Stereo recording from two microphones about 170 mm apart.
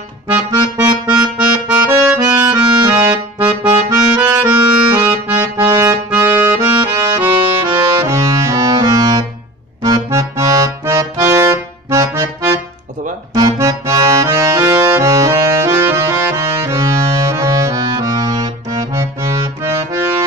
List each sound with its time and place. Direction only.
0.3 s accordion: 20° right (ahead or behind)
7.6 s music: 25° right (ahead or behind)
9.8 s accordion: 20° right (ahead or behind)